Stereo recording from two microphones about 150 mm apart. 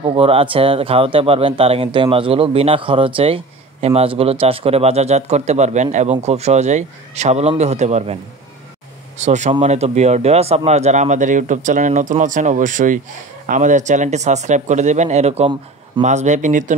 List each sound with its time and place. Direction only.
0.0 s speech: 35° right (ahead or behind)
9.2 s speech: 50° right (ahead or behind)